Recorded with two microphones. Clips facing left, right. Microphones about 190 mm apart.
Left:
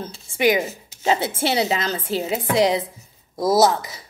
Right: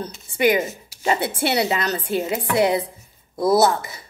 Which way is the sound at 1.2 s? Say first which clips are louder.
Even; 60° right (ahead or behind).